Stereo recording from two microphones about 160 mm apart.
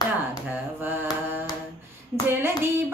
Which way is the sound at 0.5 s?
10° right (ahead or behind).